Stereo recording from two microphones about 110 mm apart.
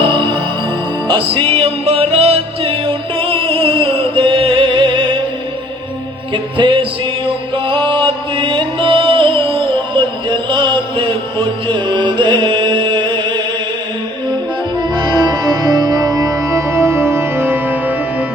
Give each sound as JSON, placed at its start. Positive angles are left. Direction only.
{"t": 0.1, "sound": "music", "side_deg": -50}
{"t": 6.3, "sound": "music", "side_deg": -50}
{"t": 14.9, "sound": "music", "side_deg": -40}